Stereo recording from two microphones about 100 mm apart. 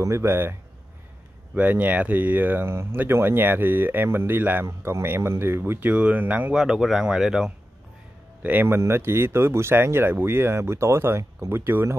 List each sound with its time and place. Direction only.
0.0 s speech: 30° right (ahead or behind)
6.5 s speech: 5° right (ahead or behind)
8.4 s speech: 20° right (ahead or behind)